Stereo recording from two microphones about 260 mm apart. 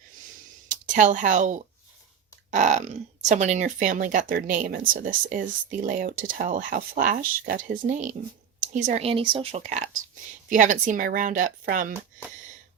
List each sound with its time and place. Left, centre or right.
0.7 s speech: right